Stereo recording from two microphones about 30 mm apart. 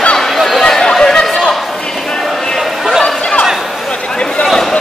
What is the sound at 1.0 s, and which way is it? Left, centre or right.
Chatter, left.